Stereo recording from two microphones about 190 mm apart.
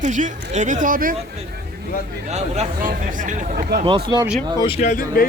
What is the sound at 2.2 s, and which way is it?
Speech, 35° right (ahead or behind).